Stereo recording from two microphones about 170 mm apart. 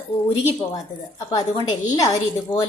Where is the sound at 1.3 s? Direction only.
25° left (ahead or behind).